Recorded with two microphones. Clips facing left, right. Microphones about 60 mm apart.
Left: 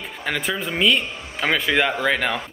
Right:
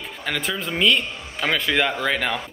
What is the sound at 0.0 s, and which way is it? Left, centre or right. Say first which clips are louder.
Speech: left 1 dB; centre.